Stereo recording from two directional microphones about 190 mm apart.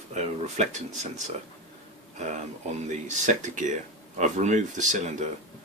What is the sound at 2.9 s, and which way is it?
Speech, 40° right (ahead or behind).